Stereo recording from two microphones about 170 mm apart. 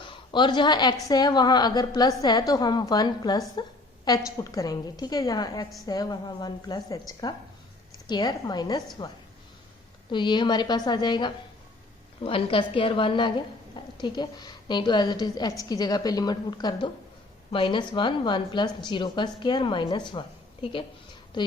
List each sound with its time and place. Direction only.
0.0 s a woman's voice: 30° left (ahead or behind)